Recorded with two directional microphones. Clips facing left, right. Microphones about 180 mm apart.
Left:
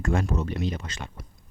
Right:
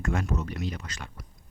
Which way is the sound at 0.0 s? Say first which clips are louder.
Left 3 dB; 30° left (ahead or behind).